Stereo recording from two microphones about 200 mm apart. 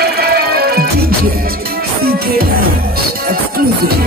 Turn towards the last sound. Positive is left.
turn(degrees=-50)  # may be behind; listen again after turning